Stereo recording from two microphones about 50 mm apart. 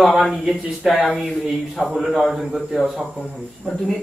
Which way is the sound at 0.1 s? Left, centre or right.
Centre.